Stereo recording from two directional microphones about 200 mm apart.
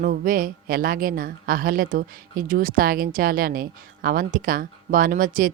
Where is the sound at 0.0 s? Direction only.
45° right (ahead or behind).